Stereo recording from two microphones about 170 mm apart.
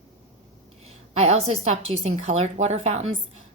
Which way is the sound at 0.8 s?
40° right (ahead or behind).